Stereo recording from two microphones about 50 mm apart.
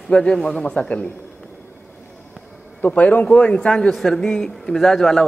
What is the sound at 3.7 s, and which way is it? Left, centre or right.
A man's voice, centre.